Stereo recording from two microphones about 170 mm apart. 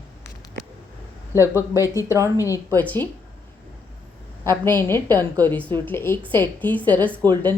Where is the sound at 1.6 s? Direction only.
15° left (ahead or behind).